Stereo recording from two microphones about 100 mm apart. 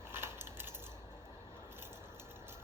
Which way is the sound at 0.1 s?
25° right (ahead or behind).